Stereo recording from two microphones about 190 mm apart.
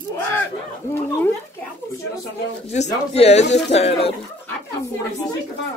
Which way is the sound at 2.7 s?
35° left (ahead or behind).